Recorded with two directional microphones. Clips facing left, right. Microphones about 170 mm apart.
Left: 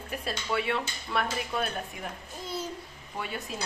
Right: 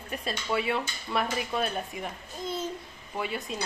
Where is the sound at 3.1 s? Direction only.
5° right (ahead or behind).